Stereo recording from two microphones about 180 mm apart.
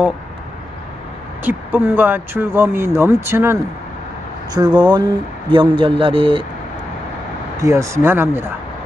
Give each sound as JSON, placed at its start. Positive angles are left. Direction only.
{"t": 1.4, "sound": "speech", "side_deg": -10}
{"t": 4.6, "sound": "a man's voice", "side_deg": -25}
{"t": 7.5, "sound": "speech", "side_deg": -15}